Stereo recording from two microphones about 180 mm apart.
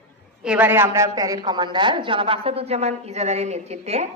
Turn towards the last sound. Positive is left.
turn(degrees=-35)  # may be behind; listen again after turning